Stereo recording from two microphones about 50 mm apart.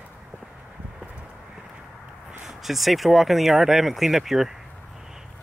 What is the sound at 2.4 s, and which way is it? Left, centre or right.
Speech, centre.